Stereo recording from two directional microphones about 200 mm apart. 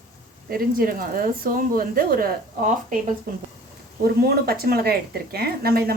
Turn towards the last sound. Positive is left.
turn(degrees=-50)  # may be behind; listen again after turning